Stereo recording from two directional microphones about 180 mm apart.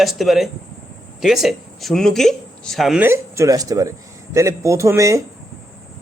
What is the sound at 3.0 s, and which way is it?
Speech, 15° right (ahead or behind).